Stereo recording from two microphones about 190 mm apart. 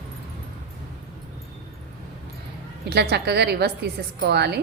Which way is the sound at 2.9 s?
60° right (ahead or behind).